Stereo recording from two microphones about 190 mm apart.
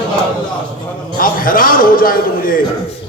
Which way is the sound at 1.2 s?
45° left (ahead or behind).